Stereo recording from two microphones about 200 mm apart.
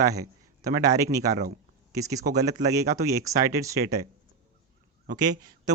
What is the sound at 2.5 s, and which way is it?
Speech, 40° right (ahead or behind).